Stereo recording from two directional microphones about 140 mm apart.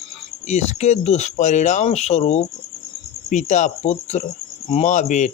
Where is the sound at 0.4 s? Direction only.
55° left (ahead or behind).